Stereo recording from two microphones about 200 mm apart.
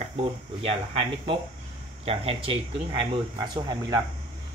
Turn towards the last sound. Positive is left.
turn(degrees=-20)  # may be behind; listen again after turning